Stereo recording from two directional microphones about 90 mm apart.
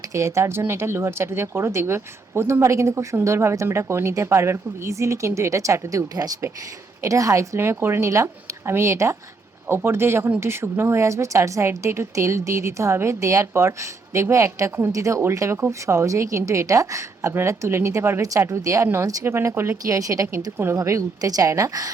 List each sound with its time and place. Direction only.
0.1 s a woman's voice: 35° right (ahead or behind)